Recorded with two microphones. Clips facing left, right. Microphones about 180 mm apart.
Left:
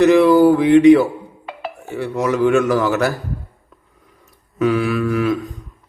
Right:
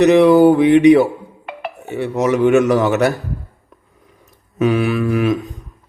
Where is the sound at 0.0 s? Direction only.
20° right (ahead or behind).